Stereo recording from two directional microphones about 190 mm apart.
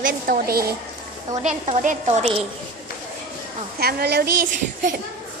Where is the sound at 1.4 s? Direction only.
35° right (ahead or behind).